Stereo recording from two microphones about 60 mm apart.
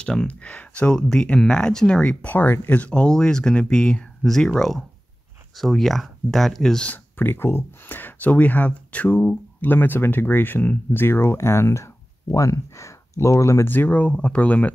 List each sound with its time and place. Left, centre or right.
0.0 s speech: centre
0.3 s speech: left
2.2 s speech: left
2.7 s speech: centre
6.9 s speech: left
10.9 s speech: left
13.7 s speech: left